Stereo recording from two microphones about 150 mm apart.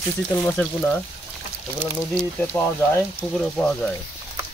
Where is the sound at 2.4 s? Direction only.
15° left (ahead or behind).